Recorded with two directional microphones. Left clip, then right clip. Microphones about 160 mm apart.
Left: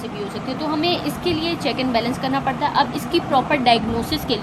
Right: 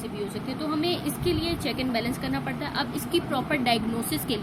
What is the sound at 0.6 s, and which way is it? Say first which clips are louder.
A woman's voice: left 7 dB; 25° right (ahead or behind).